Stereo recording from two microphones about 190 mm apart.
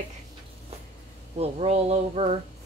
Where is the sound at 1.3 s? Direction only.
35° right (ahead or behind).